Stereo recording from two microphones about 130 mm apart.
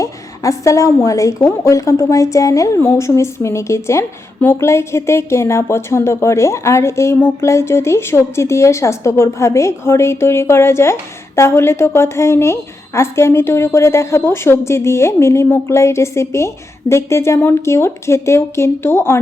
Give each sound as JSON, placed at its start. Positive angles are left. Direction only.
{"t": 0.0, "sound": "a woman's voice", "side_deg": 25}